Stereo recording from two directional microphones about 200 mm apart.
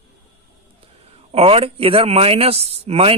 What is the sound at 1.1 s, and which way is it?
A man's voice, 30° right (ahead or behind).